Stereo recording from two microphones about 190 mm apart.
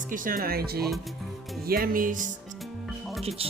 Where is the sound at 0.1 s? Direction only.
45° right (ahead or behind).